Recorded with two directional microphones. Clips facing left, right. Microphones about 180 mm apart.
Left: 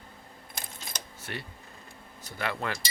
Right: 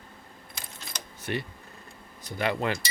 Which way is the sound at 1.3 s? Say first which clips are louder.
Right 8 dB; 20° right (ahead or behind).